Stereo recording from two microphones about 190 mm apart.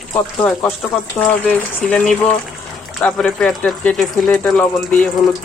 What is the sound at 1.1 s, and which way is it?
Speech, 10° left (ahead or behind).